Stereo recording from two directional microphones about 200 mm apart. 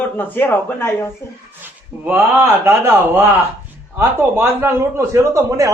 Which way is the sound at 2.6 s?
10° right (ahead or behind).